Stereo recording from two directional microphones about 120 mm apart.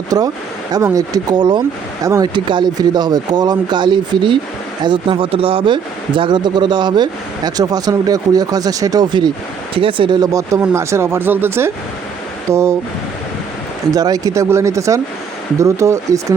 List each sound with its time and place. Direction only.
0.1 s speech: 30° right (ahead or behind)
13.9 s speech: 30° right (ahead or behind)